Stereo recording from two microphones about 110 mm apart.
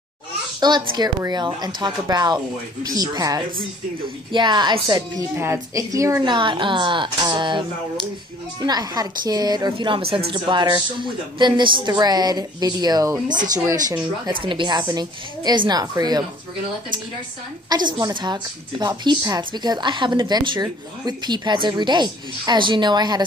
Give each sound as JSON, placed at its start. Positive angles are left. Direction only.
{"t": 0.6, "sound": "a woman's voice", "side_deg": -40}
{"t": 5.3, "sound": "a woman's voice", "side_deg": -25}
{"t": 6.2, "sound": "a woman's voice", "side_deg": -45}
{"t": 14.2, "sound": "a woman's voice", "side_deg": -50}
{"t": 17.6, "sound": "a woman's voice", "side_deg": -40}